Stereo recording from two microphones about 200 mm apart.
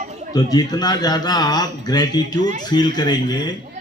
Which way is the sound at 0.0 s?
35° right (ahead or behind).